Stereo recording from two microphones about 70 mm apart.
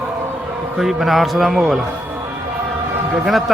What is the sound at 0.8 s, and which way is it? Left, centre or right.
A man's voice, centre.